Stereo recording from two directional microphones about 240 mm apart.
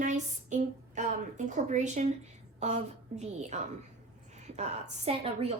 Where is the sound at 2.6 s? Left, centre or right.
Right.